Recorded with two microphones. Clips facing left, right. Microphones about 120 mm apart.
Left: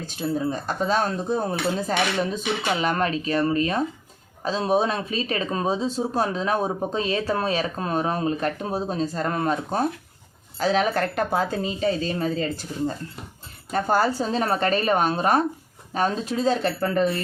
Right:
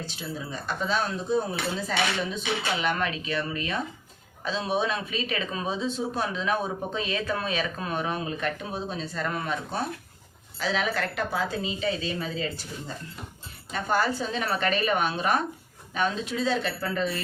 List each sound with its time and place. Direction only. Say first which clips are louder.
0.0 s speech: left 10 dB; 45° left (ahead or behind)
13.7 s speech: left 5 dB; 40° left (ahead or behind)